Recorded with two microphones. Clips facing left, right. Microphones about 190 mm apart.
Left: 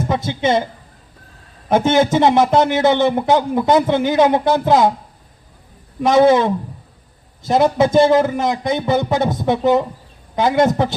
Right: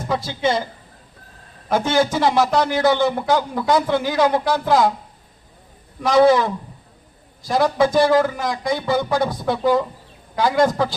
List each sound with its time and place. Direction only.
0.1 s a man's voice: 25° left (ahead or behind)
1.7 s a man's voice: 25° left (ahead or behind)
6.0 s a man's voice: 25° left (ahead or behind)